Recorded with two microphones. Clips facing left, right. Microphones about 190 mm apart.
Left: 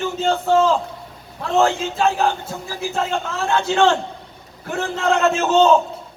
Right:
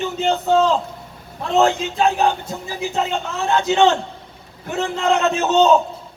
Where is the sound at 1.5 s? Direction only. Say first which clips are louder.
Right 1 dB; 15° right (ahead or behind).